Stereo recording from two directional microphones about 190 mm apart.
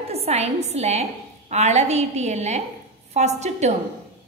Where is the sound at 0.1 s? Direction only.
35° right (ahead or behind).